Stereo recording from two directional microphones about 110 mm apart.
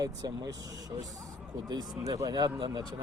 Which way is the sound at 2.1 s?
35° right (ahead or behind).